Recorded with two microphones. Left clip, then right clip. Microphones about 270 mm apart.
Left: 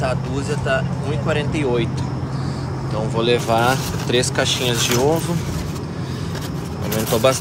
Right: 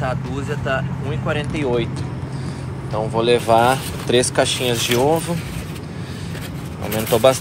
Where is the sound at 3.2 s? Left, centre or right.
Centre.